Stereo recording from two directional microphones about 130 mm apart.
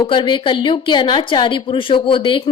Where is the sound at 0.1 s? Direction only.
40° left (ahead or behind).